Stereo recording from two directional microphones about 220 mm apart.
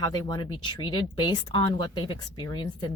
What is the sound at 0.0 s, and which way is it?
Speech, 20° left (ahead or behind).